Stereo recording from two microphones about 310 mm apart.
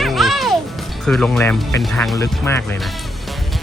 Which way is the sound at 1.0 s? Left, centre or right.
Centre.